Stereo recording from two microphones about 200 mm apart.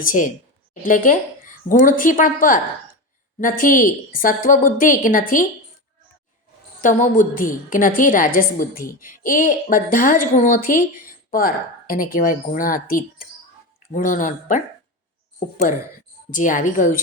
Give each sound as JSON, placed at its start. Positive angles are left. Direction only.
{"t": 0.0, "sound": "a woman's voice", "side_deg": 40}
{"t": 6.8, "sound": "a woman's voice", "side_deg": 40}
{"t": 16.3, "sound": "a woman's voice", "side_deg": 40}